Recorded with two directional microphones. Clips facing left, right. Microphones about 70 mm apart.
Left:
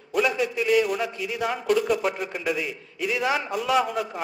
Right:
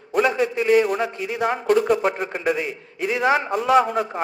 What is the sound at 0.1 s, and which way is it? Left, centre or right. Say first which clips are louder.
A man's voice: right 4 dB; right.